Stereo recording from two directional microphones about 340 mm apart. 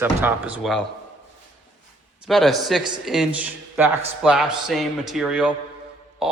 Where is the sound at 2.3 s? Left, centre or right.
Centre.